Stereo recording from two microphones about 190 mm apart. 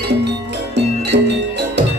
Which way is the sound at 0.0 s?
65° right (ahead or behind).